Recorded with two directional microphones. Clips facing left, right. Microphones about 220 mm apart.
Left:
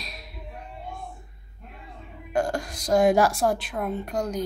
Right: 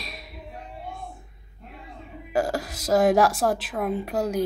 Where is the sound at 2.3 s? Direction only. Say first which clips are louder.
Right 1 dB; 5° right (ahead or behind).